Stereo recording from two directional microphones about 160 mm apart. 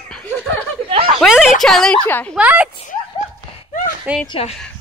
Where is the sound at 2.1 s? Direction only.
10° left (ahead or behind).